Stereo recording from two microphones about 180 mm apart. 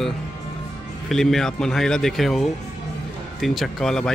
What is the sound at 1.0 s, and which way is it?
Speech, centre (ahead or behind).